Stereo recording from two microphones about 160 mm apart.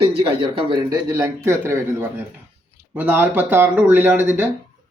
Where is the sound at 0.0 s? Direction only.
35° right (ahead or behind); by 4.4 s 10° right (ahead or behind).